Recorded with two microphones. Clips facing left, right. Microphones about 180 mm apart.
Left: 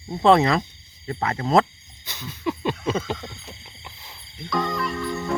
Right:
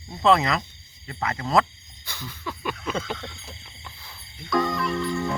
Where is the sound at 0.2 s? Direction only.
30° left (ahead or behind).